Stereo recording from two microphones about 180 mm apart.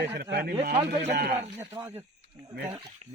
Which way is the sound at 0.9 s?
40° right (ahead or behind).